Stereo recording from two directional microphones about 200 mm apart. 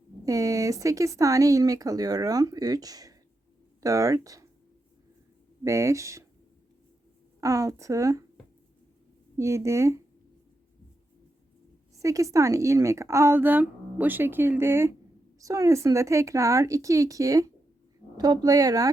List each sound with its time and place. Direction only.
0.3 s speech: 15° right (ahead or behind)
5.6 s speech: 15° right (ahead or behind)
7.4 s speech: 15° right (ahead or behind)
9.4 s speech: 15° right (ahead or behind)
11.9 s speech: 15° right (ahead or behind)